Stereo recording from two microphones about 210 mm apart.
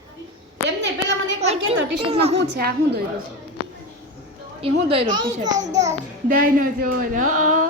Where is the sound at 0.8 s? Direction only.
55° right (ahead or behind).